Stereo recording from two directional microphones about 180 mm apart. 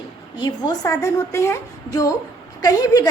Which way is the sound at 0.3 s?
25° left (ahead or behind).